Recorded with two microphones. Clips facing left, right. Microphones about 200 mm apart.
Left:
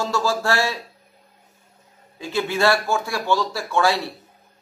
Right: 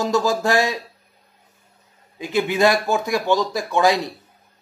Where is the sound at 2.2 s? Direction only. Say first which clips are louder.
Right 3 dB; 15° right (ahead or behind).